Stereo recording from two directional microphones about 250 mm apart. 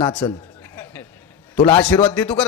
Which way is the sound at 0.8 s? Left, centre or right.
Centre.